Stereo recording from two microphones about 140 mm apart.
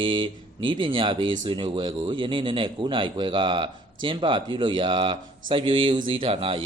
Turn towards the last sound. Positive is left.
turn(degrees=-40)  # may be behind; listen again after turning